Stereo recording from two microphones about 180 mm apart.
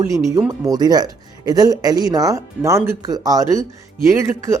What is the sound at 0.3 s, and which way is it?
Speech, 15° right (ahead or behind).